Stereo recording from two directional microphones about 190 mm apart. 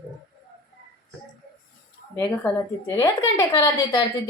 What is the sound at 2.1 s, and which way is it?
A woman's voice, 15° left (ahead or behind).